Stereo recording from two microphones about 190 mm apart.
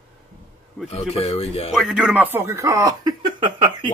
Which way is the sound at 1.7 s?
Centre (ahead or behind).